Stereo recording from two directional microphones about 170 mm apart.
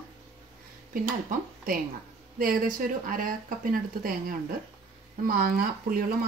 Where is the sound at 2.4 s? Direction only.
55° right (ahead or behind).